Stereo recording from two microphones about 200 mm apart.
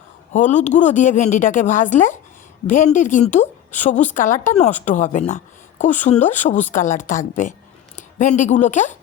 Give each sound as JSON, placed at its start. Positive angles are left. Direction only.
{"t": 0.3, "sound": "a woman's voice", "side_deg": 35}